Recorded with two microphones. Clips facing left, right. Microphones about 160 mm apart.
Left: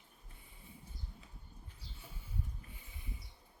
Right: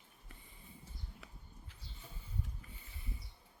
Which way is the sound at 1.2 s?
75° right (ahead or behind).